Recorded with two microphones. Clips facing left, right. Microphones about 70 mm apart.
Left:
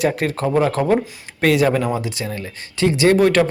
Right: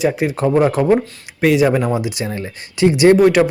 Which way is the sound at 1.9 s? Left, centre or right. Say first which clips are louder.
Right 3 dB; centre.